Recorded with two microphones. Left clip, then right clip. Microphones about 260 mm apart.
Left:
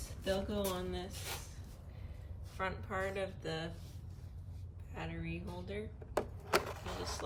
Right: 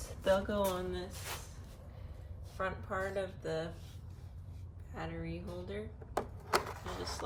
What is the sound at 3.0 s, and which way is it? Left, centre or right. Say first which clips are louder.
Speech: right 2 dB; centre.